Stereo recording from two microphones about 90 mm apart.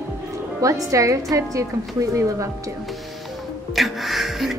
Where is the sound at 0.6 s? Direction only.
35° right (ahead or behind).